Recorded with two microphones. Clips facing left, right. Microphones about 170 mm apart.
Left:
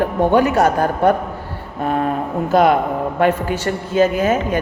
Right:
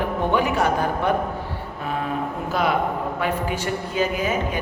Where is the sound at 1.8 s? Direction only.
50° left (ahead or behind).